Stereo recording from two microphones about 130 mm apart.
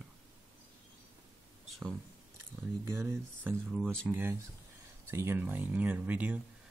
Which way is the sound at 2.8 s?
20° right (ahead or behind).